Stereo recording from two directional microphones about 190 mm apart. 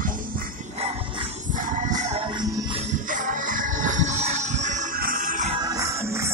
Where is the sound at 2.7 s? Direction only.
40° right (ahead or behind).